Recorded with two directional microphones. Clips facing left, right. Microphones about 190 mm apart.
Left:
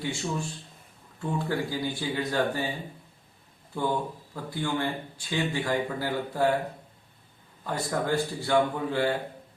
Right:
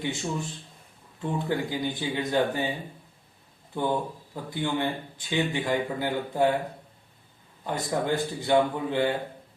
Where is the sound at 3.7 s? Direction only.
20° right (ahead or behind).